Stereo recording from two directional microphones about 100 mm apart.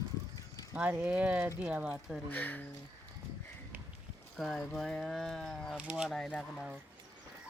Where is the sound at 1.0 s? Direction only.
15° right (ahead or behind).